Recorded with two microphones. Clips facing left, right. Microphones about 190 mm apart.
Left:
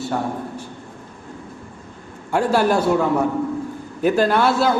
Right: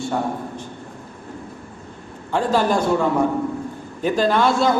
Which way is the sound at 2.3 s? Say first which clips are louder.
Left 1 dB; 10° left (ahead or behind).